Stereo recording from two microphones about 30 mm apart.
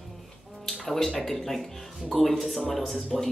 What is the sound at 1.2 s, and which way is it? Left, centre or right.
Speech, centre.